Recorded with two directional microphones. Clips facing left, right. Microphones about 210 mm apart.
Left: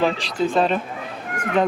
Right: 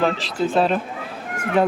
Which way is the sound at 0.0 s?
5° right (ahead or behind).